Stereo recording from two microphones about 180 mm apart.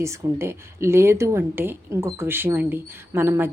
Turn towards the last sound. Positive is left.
turn(degrees=-15)  # may be behind; listen again after turning